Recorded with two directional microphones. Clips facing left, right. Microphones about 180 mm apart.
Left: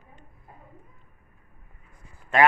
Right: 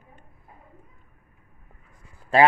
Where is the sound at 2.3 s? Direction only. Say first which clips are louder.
Right 2 dB; 30° right (ahead or behind).